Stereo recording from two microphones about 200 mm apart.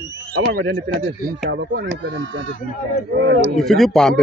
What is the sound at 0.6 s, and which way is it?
Speech, 65° right (ahead or behind).